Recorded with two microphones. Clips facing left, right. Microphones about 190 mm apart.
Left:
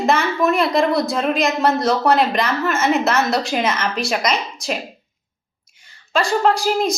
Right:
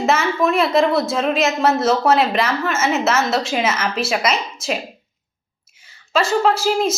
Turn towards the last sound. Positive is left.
turn(degrees=0)  # may be behind; listen again after turning